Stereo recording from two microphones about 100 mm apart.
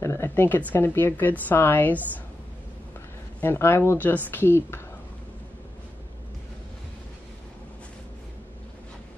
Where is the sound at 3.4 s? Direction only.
20° left (ahead or behind).